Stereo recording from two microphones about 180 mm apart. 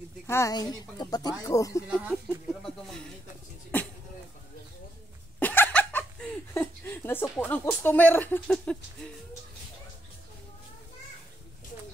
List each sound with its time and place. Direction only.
0.3 s speech: 15° left (ahead or behind)
1.9 s speech: 10° right (ahead or behind)
5.4 s laughter: 10° left (ahead or behind)